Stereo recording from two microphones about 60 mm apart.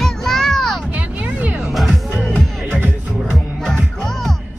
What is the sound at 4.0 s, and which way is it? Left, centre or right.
Music, centre.